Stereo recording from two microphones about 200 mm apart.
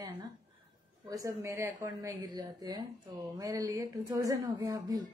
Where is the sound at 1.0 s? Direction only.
15° right (ahead or behind).